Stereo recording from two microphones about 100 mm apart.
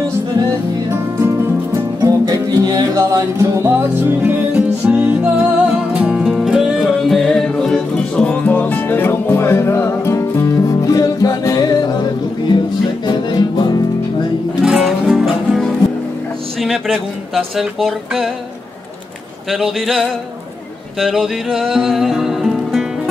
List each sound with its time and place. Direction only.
2.0 s music: 40° right (ahead or behind); by 13.7 s 45° left (ahead or behind)
14.6 s music: centre (ahead or behind)
16.6 s speech: centre (ahead or behind)
19.5 s speech: centre (ahead or behind)
21.0 s music: centre (ahead or behind)